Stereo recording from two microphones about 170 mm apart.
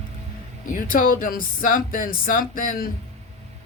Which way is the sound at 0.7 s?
55° left (ahead or behind).